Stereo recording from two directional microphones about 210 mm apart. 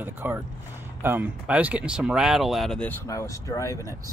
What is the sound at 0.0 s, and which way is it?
Speech, 10° right (ahead or behind).